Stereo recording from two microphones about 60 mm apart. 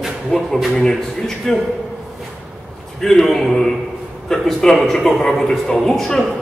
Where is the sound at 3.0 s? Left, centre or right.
Centre.